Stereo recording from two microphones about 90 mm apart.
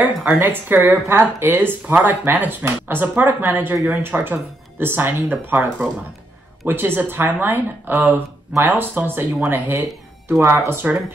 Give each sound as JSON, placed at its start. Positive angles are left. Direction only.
{"t": 0.3, "sound": "a woman's voice", "side_deg": -25}